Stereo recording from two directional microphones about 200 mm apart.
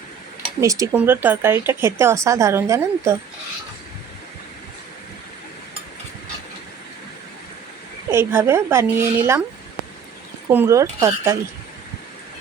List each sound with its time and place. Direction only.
0.6 s speech: 15° right (ahead or behind)
8.1 s speech: 10° right (ahead or behind)
10.5 s speech: 15° right (ahead or behind)